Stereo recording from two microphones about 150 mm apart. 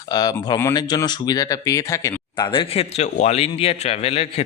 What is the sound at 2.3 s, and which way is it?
Speech, 35° left (ahead or behind).